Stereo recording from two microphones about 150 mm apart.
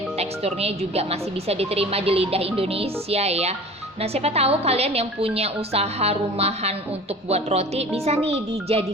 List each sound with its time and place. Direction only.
0.2 s speech: 45° right (ahead or behind)